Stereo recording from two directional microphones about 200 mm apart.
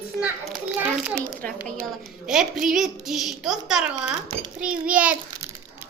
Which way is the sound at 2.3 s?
Centre (ahead or behind).